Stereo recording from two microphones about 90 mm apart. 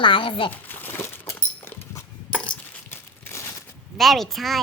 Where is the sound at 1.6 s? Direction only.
25° left (ahead or behind).